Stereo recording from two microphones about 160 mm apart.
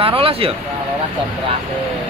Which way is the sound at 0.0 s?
35° right (ahead or behind).